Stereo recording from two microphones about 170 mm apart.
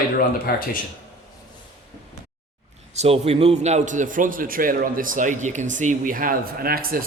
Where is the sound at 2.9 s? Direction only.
40° right (ahead or behind).